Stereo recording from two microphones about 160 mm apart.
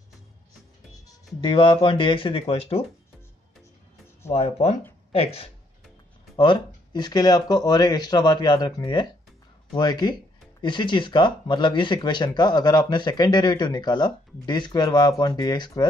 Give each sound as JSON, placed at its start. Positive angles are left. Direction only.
{"t": 1.0, "sound": "speech", "side_deg": 30}
{"t": 4.3, "sound": "speech", "side_deg": 40}